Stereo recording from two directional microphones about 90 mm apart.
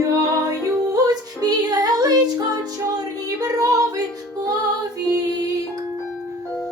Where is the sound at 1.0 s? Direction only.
45° right (ahead or behind).